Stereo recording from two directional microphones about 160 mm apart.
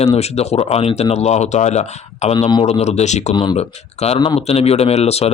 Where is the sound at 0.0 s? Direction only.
40° left (ahead or behind).